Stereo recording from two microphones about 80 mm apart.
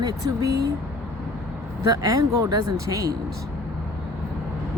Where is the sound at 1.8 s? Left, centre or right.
Right.